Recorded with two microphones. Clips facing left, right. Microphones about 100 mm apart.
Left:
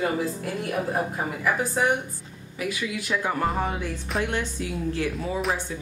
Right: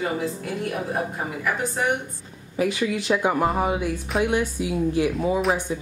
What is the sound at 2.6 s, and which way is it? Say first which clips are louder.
A woman's voice: right 6 dB; 30° right (ahead or behind).